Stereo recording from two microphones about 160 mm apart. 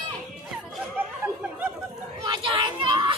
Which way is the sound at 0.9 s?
10° right (ahead or behind).